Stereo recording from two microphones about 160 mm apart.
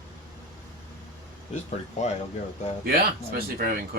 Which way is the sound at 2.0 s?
45° left (ahead or behind).